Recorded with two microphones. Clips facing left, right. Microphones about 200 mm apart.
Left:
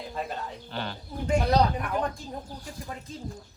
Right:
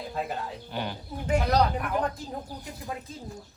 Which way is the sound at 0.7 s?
15° right (ahead or behind).